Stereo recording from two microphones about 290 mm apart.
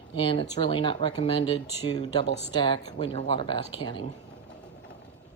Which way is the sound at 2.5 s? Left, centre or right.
Centre.